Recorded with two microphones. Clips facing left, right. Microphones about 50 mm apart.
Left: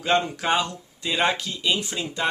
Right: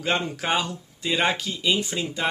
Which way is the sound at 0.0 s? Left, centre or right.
Centre.